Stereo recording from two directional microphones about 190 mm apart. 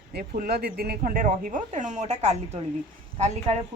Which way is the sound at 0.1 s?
55° right (ahead or behind).